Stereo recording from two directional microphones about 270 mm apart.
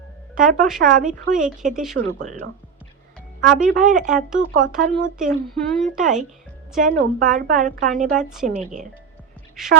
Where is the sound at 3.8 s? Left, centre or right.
Right.